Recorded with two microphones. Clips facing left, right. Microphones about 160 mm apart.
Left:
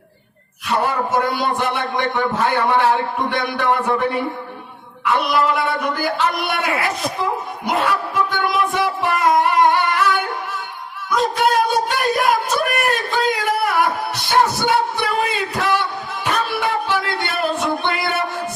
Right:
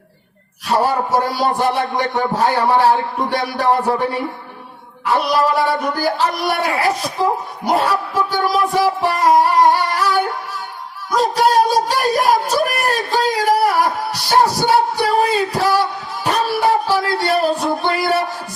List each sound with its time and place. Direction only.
0.7 s a man's voice: 35° right (ahead or behind)
5.0 s a man's voice: 35° right (ahead or behind)
11.1 s a sound: 35° right (ahead or behind)